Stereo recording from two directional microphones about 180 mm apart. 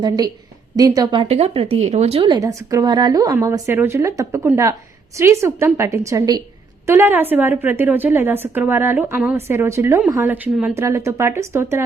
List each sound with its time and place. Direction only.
0.8 s a woman's voice: 20° right (ahead or behind)